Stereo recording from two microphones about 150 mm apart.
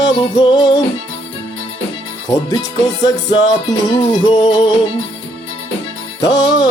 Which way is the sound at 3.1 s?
25° left (ahead or behind).